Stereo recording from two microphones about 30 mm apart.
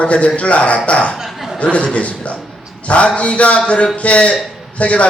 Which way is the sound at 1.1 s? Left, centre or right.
Centre.